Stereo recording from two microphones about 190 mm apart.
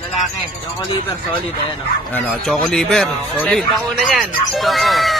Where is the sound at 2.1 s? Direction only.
5° left (ahead or behind).